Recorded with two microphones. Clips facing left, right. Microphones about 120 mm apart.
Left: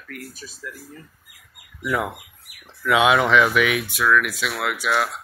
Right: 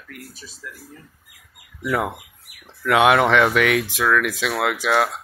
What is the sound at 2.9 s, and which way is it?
Speech, 60° right (ahead or behind).